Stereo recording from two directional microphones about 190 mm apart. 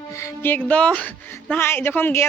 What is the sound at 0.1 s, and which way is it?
Speech, 15° left (ahead or behind).